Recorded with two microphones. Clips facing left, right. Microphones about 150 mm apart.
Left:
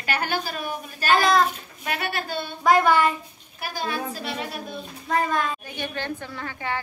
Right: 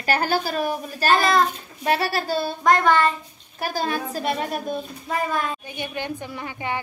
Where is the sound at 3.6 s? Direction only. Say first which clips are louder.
Right 4 dB; 40° right (ahead or behind).